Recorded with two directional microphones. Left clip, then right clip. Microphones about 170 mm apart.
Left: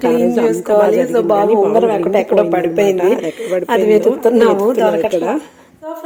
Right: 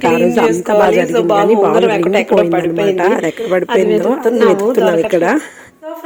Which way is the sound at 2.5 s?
40° left (ahead or behind).